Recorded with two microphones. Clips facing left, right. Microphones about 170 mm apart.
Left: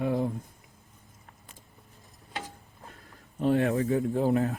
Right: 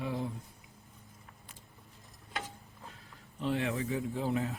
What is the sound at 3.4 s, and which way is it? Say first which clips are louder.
Speech: left 8 dB; 45° left (ahead or behind).